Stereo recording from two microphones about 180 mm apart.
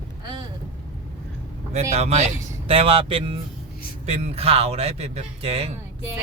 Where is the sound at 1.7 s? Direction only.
35° right (ahead or behind).